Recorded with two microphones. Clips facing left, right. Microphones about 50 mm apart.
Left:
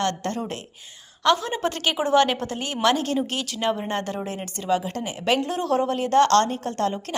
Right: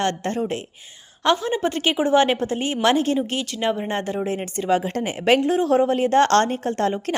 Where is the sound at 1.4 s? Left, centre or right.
Centre.